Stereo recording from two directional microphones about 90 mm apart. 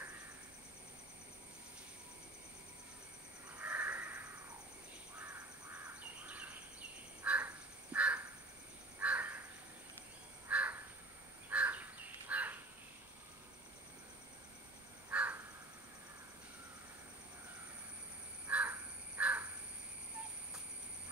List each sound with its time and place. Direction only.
3.5 s crow: 20° right (ahead or behind)
6.2 s bird: 15° right (ahead or behind)
7.2 s crow: 20° right (ahead or behind)
10.5 s crow: 15° right (ahead or behind)
15.0 s crow: 20° right (ahead or behind)
18.5 s crow: 15° right (ahead or behind)